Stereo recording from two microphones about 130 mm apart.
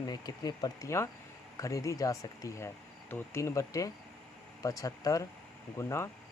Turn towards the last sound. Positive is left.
turn(degrees=20)  # may be behind; listen again after turning